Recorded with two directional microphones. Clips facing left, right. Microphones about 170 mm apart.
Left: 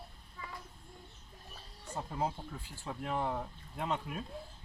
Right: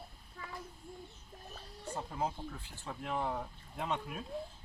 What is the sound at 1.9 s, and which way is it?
Speech, 5° left (ahead or behind).